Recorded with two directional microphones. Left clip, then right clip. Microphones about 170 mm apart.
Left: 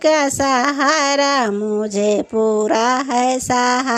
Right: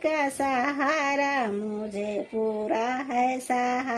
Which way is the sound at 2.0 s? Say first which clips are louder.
Left 12 dB; 40° left (ahead or behind).